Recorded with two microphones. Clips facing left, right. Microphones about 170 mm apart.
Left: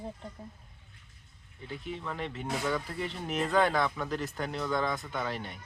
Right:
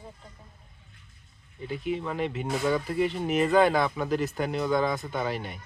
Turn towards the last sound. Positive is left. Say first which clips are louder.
# right 5 dB
turn(degrees=-5)  # may be behind; listen again after turning